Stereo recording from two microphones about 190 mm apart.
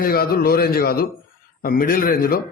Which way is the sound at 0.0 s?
50° left (ahead or behind).